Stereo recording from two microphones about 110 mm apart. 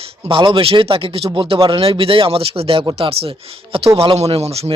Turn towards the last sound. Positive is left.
turn(degrees=-65)  # may be behind; listen again after turning